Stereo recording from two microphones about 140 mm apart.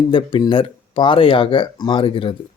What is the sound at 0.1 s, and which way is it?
Speech, 35° left (ahead or behind).